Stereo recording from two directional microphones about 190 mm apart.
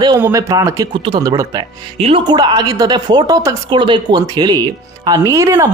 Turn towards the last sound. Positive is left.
turn(degrees=-15)  # may be behind; listen again after turning